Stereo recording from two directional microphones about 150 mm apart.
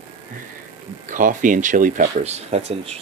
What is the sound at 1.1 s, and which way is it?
Speech, 60° right (ahead or behind).